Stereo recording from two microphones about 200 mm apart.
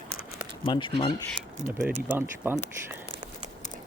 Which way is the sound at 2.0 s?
10° right (ahead or behind).